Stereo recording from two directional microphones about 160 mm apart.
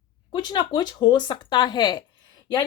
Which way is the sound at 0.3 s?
25° left (ahead or behind).